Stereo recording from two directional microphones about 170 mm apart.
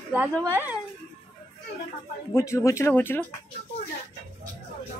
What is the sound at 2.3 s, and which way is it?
Speech, 15° left (ahead or behind).